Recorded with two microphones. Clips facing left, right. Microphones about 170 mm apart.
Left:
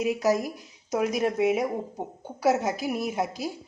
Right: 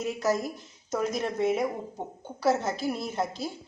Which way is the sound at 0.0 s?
15° left (ahead or behind).